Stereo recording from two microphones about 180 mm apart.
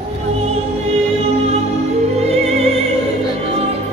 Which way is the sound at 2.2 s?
35° right (ahead or behind).